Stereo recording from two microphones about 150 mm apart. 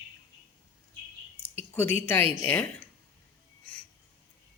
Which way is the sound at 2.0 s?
15° left (ahead or behind).